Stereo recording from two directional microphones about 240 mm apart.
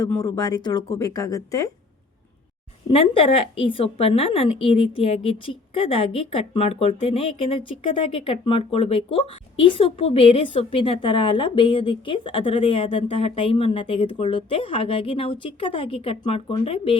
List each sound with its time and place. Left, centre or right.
0.0 s speech: centre
3.0 s a woman's voice: left